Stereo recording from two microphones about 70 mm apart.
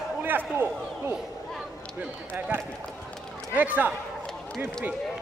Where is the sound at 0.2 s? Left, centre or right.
Right.